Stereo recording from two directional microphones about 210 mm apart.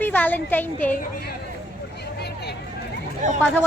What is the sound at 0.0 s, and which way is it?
Speech, 10° left (ahead or behind).